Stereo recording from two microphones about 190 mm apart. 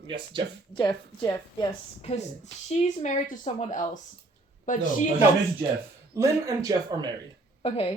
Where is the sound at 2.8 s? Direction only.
40° left (ahead or behind).